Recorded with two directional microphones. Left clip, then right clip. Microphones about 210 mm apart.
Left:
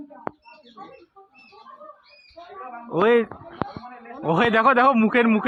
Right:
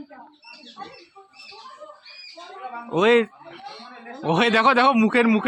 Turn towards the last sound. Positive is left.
turn(degrees=-10)  # may be behind; listen again after turning